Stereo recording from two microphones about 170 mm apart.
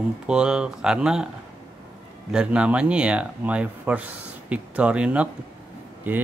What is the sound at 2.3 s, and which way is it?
Speech, 5° right (ahead or behind).